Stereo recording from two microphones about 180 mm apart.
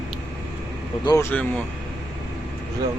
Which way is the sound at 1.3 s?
10° left (ahead or behind).